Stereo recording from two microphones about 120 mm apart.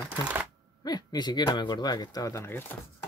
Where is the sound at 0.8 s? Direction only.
35° left (ahead or behind); by 3.1 s 20° left (ahead or behind).